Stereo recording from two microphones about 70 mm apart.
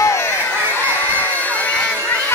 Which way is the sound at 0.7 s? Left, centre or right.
Left.